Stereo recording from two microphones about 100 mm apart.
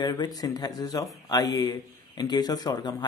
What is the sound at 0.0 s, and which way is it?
A man's voice, 45° left (ahead or behind).